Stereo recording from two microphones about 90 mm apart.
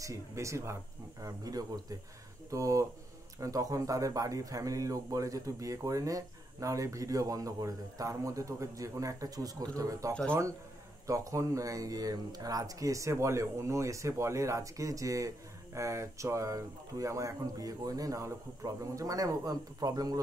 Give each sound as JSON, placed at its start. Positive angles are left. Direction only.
{"t": 0.0, "sound": "speech", "side_deg": -35}
{"t": 1.2, "sound": "speech", "side_deg": -45}